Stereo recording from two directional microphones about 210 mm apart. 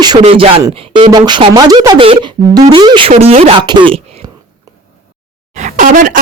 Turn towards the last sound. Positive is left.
turn(degrees=-40)  # may be behind; listen again after turning